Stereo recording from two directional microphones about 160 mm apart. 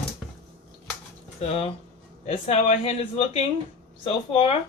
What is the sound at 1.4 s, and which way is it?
Speech, 40° left (ahead or behind).